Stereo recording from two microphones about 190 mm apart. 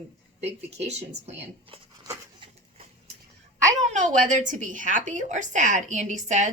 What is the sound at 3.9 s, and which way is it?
A woman's voice, 40° right (ahead or behind).